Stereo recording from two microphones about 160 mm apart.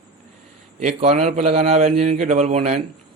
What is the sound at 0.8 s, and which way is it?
Speech, 45° right (ahead or behind).